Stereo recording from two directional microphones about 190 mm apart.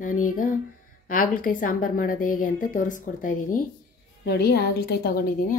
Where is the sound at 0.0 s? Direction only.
45° left (ahead or behind).